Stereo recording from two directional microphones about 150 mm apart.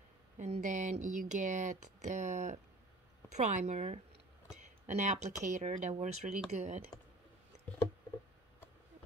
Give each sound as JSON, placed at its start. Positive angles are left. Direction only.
{"t": 0.4, "sound": "speech", "side_deg": -55}